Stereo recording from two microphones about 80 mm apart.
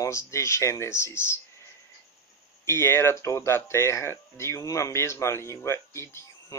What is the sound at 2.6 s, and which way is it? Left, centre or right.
Speech, left.